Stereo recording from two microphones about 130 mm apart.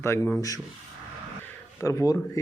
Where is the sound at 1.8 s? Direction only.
25° left (ahead or behind).